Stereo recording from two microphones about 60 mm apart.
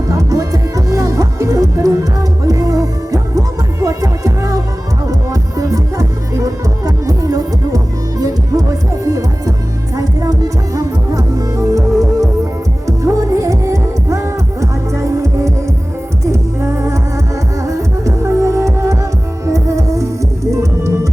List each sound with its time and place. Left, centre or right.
0.1 s music: right
9.9 s music: right